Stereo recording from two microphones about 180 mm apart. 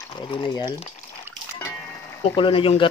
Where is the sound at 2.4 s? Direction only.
30° left (ahead or behind).